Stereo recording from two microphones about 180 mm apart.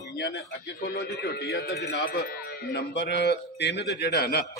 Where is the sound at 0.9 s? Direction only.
65° left (ahead or behind).